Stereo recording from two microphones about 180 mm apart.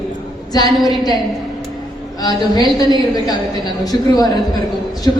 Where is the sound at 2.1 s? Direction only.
20° left (ahead or behind).